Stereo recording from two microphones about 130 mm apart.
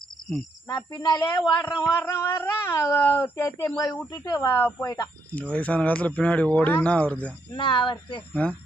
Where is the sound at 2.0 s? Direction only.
20° left (ahead or behind).